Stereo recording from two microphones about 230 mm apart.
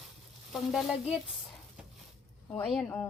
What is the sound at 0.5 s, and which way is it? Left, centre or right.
Speech, centre.